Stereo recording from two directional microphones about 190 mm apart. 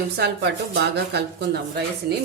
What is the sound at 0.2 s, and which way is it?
A woman's voice, 60° right (ahead or behind).